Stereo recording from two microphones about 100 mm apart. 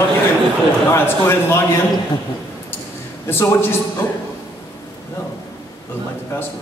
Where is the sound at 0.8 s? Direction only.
25° left (ahead or behind).